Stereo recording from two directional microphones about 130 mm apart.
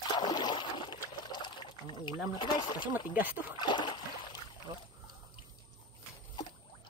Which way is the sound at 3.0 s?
15° right (ahead or behind).